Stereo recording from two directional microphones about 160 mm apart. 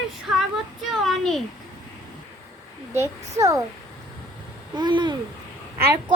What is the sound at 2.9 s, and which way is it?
Speech, 20° right (ahead or behind).